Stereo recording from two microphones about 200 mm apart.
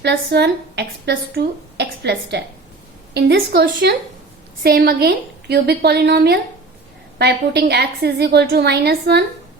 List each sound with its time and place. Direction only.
0.0 s a woman's voice: 55° right (ahead or behind)